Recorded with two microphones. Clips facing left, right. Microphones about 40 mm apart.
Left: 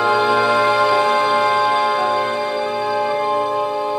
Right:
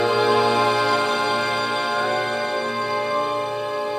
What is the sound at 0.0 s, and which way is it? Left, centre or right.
Music, centre.